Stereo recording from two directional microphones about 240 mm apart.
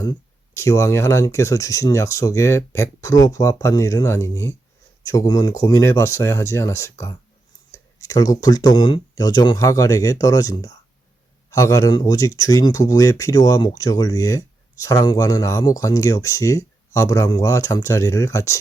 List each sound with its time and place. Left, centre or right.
0.0 s speech: centre